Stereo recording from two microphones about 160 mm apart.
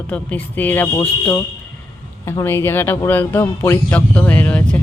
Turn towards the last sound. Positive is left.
turn(degrees=10)  # may be behind; listen again after turning